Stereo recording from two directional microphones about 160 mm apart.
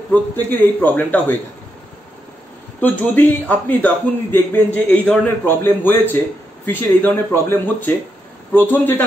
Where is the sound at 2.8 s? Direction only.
10° left (ahead or behind).